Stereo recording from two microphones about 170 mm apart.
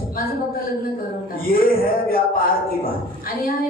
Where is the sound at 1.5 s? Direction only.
60° left (ahead or behind).